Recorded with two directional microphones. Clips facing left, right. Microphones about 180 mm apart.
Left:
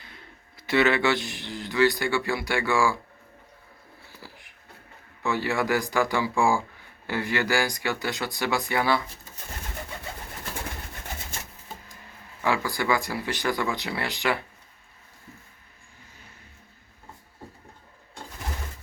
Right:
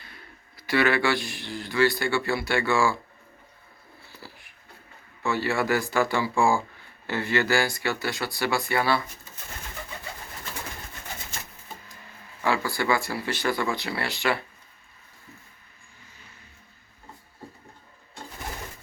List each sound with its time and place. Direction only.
0.0 s a man's voice: 20° left (ahead or behind)
4.2 s shuffle: 20° left (ahead or behind)
5.2 s speech: 15° left (ahead or behind)
12.4 s speech: 15° left (ahead or behind)